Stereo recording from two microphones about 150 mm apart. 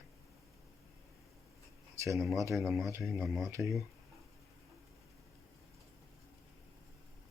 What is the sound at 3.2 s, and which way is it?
Speech, centre (ahead or behind).